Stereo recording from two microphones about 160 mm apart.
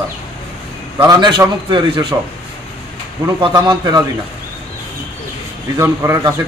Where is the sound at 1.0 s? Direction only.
25° right (ahead or behind).